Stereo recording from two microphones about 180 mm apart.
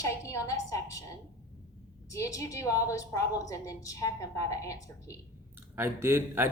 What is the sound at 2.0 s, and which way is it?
A woman's voice, 15° left (ahead or behind).